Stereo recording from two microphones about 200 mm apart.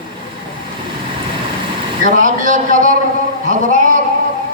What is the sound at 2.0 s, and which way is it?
A man's voice, 40° right (ahead or behind).